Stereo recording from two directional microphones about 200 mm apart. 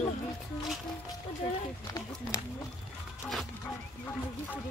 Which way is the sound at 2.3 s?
15° left (ahead or behind).